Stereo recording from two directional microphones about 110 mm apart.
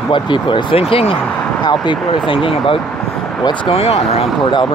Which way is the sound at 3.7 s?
65° left (ahead or behind).